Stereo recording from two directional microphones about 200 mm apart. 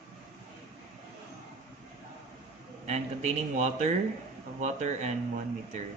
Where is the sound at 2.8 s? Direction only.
35° right (ahead or behind).